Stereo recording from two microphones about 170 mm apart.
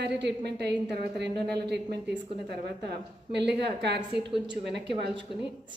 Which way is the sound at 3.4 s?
80° right.